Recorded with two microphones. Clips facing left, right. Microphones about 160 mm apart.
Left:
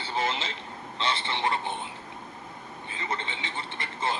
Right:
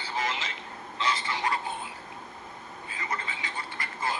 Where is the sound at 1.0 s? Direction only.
30° left (ahead or behind).